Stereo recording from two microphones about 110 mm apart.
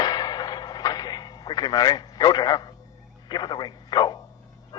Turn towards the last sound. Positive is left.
turn(degrees=40)  # may be behind; listen again after turning